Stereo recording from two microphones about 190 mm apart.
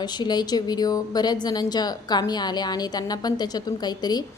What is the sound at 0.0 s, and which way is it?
A woman's voice, 20° left (ahead or behind).